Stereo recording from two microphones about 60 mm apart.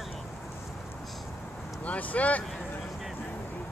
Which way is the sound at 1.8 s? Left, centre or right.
Left.